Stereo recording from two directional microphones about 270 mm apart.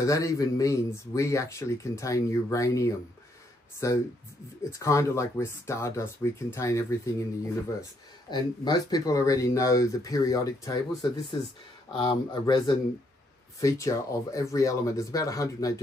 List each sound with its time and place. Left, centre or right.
0.0 s speech: centre